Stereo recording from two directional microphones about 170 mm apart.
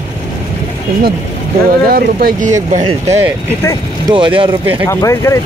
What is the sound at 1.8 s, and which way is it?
Speech, 65° right (ahead or behind).